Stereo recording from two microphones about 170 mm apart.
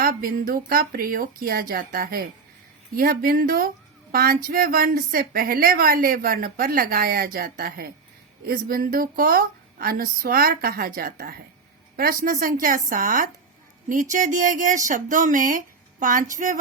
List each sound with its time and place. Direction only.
0.0 s speech: 60° right (ahead or behind)